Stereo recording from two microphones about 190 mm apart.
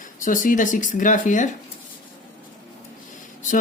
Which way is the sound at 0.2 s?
45° left (ahead or behind).